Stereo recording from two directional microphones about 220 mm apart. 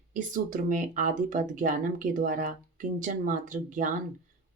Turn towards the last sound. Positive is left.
turn(degrees=-35)  # may be behind; listen again after turning